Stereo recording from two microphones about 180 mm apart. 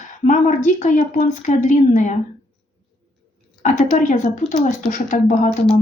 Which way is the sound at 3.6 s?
45° left (ahead or behind).